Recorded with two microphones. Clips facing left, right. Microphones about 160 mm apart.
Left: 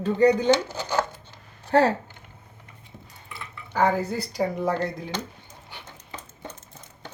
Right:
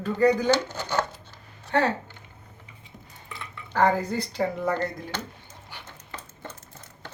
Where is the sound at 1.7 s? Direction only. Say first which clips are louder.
Left 4 dB; 35° left (ahead or behind).